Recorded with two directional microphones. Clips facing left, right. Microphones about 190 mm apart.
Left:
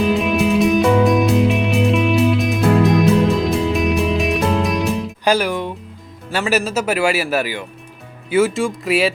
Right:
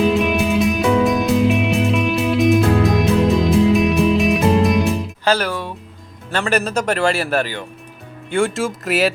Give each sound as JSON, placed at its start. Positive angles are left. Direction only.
{"t": 0.1, "sound": "music", "side_deg": 0}
{"t": 5.2, "sound": "music", "side_deg": 15}
{"t": 6.3, "sound": "speech", "side_deg": 5}